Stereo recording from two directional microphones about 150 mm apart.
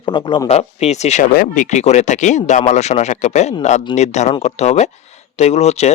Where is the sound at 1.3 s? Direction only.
75° left (ahead or behind); by 5.9 s 45° left (ahead or behind).